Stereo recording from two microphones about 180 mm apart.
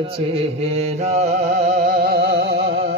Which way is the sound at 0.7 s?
40° right (ahead or behind).